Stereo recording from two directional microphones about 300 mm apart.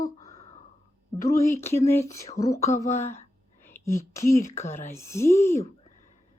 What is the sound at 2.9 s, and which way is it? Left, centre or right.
Speech, left.